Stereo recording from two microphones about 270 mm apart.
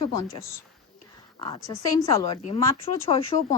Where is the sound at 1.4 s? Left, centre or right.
Centre.